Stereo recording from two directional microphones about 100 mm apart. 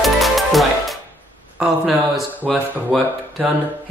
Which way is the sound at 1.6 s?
5° right (ahead or behind).